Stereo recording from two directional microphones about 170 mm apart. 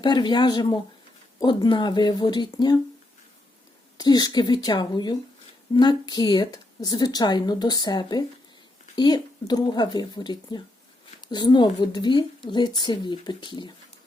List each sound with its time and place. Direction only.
0.0 s a woman's voice: 25° left (ahead or behind)
3.9 s a woman's voice: 25° left (ahead or behind)